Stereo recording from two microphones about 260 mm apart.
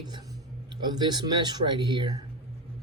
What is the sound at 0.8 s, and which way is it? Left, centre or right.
Speech, centre.